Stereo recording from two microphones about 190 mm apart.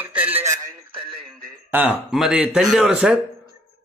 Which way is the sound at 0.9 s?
30° right (ahead or behind).